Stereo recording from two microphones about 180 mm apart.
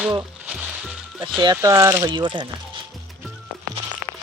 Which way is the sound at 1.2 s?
20° right (ahead or behind).